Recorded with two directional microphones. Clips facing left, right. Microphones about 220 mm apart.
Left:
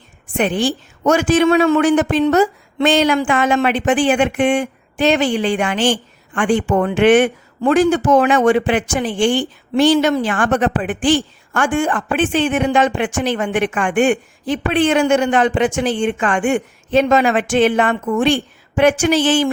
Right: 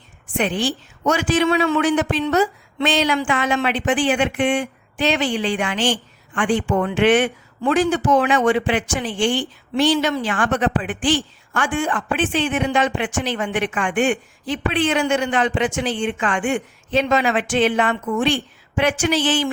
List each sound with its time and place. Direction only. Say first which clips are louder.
0.3 s a woman's voice: left 4 dB; 45° left (ahead or behind)